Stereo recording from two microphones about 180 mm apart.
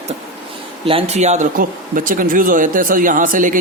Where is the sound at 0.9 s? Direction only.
35° right (ahead or behind).